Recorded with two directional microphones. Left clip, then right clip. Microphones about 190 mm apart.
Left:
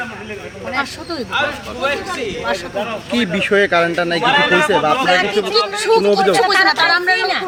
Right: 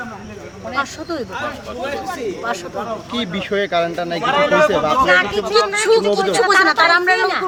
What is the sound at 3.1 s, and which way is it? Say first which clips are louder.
Speech: left 9 dB; 50° left (ahead or behind).